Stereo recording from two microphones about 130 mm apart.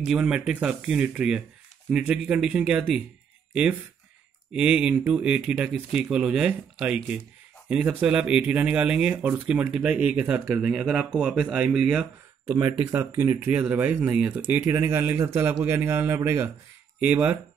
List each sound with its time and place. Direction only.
0.0 s speech: 5° right (ahead or behind)
4.5 s speech: 5° right (ahead or behind)
12.5 s a man's voice: 15° right (ahead or behind)